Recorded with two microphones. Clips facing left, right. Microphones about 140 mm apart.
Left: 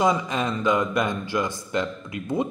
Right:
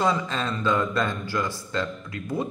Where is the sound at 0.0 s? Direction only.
15° left (ahead or behind).